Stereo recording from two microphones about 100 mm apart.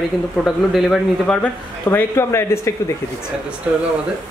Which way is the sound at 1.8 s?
25° left (ahead or behind).